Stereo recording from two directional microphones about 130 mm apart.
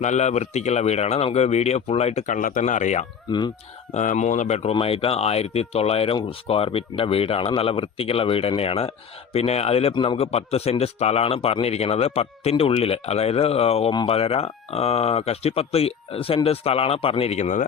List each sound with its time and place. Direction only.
0.0 s speech: 60° left (ahead or behind)
4.7 s speech: 45° left (ahead or behind); by 17.7 s 65° left (ahead or behind)